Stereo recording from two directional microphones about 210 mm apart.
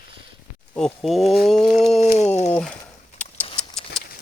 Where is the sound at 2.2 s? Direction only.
30° left (ahead or behind).